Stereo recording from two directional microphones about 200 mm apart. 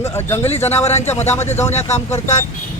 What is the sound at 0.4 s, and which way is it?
Speech, 30° left (ahead or behind).